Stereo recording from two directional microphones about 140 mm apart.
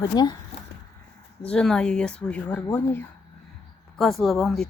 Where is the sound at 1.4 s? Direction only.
5° left (ahead or behind).